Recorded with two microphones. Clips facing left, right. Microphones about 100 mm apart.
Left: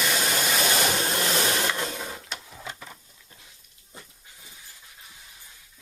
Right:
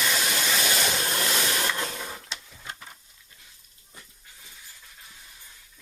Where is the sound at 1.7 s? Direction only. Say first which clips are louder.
Left 1 dB; 5° left (ahead or behind).